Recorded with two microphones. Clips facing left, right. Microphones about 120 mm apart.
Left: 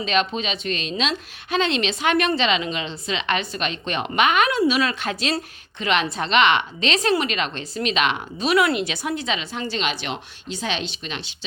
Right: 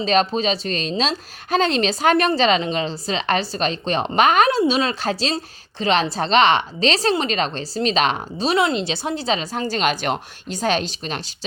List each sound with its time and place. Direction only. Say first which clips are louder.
0.0 s a woman's voice: right 4 dB; 35° right (ahead or behind)